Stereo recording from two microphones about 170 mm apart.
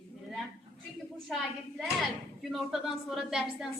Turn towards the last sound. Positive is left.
turn(degrees=-5)  # may be behind; listen again after turning